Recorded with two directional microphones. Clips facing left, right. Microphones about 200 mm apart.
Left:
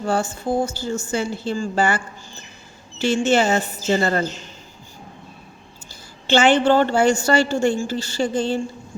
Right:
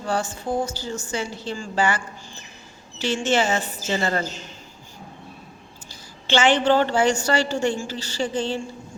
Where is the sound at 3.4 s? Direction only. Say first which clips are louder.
Left 4 dB; 40° left (ahead or behind).